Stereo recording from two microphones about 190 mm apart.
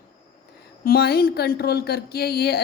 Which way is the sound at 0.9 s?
50° left (ahead or behind).